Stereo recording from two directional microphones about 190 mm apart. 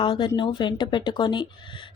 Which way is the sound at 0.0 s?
25° left (ahead or behind).